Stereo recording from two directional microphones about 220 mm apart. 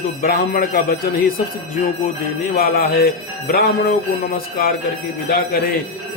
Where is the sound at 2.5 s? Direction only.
45° left (ahead or behind).